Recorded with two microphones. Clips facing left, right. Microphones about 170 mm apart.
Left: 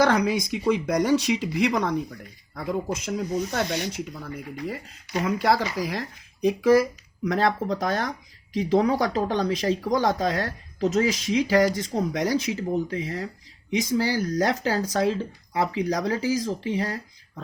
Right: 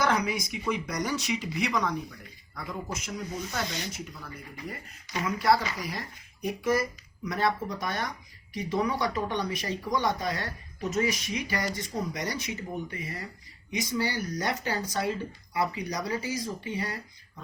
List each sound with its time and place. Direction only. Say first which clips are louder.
0.0 s speech: left 6 dB; 70° left (ahead or behind)
3.5 s speech: left 7 dB; 65° left (ahead or behind)
4.5 s speech: left 7 dB; 80° left